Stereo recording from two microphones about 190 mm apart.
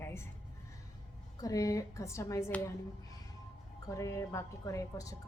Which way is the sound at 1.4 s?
20° left (ahead or behind).